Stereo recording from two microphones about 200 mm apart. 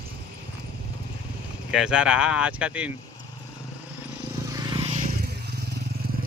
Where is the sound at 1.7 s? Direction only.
5° right (ahead or behind).